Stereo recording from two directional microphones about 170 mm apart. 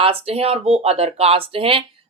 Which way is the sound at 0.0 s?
35° right (ahead or behind).